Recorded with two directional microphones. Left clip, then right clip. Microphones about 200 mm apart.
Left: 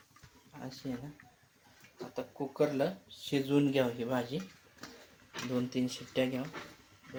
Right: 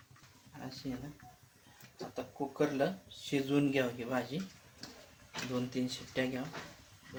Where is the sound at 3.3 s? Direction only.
25° left (ahead or behind).